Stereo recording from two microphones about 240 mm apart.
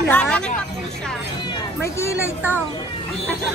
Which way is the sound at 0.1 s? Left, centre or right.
Centre.